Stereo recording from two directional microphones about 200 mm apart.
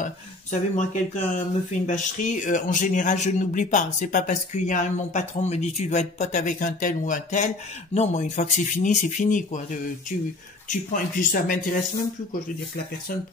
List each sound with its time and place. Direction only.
0.0 s speech: 40° left (ahead or behind)